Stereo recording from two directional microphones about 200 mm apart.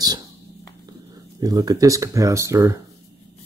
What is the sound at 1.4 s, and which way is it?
Speech, 20° right (ahead or behind).